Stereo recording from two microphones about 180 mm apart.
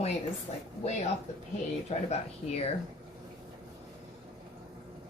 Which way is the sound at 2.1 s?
35° left (ahead or behind).